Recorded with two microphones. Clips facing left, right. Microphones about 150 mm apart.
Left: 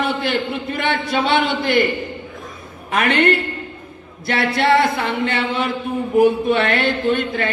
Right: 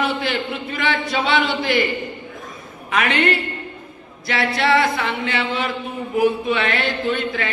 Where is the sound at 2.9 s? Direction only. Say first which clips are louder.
Left 3 dB; 50° left (ahead or behind).